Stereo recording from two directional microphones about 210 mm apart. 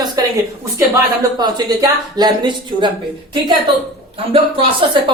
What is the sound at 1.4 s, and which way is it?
Speech, 20° right (ahead or behind).